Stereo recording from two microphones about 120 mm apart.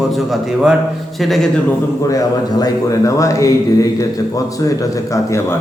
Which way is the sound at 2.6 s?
25° left (ahead or behind).